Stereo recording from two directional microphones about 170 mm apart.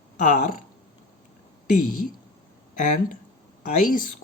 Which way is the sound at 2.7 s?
50° left (ahead or behind).